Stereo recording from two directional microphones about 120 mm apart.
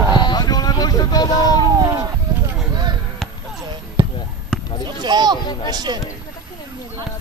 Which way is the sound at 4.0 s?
40° right (ahead or behind).